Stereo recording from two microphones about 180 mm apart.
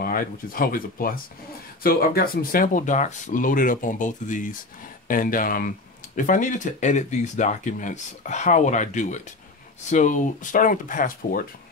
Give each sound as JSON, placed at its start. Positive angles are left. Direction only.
{"t": 0.0, "sound": "speech", "side_deg": 50}